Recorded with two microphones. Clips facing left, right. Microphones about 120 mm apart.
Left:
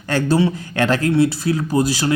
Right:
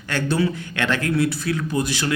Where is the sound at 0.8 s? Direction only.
35° left (ahead or behind).